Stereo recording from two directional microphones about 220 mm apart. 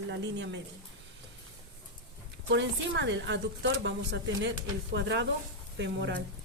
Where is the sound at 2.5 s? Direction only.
55° right (ahead or behind).